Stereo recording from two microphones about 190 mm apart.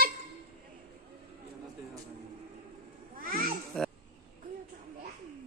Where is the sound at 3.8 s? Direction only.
5° left (ahead or behind).